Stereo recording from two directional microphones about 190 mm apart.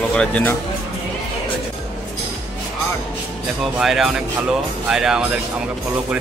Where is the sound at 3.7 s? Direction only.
Centre (ahead or behind).